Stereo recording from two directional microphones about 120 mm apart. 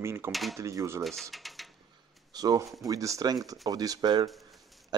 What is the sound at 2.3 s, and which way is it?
A man's voice, 35° right (ahead or behind).